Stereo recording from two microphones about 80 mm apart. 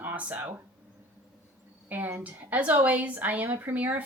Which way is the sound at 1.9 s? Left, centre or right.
Right.